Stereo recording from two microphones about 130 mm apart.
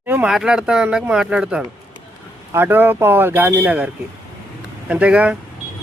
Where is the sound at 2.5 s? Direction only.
15° right (ahead or behind).